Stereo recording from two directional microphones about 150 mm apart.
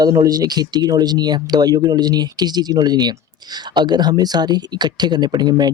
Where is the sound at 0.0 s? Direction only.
25° right (ahead or behind).